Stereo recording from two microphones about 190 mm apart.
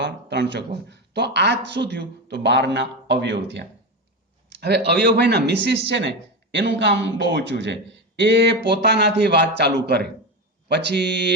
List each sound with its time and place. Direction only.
0.0 s speech: 65° right (ahead or behind)
4.4 s a sound: 60° right (ahead or behind)
5.0 s speech: 60° right (ahead or behind)